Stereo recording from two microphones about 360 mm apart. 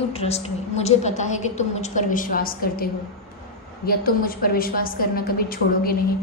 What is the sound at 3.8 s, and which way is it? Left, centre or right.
A woman's voice, left.